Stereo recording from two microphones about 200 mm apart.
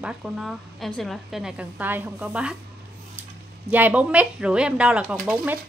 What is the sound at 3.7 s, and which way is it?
A woman's voice, 10° right (ahead or behind).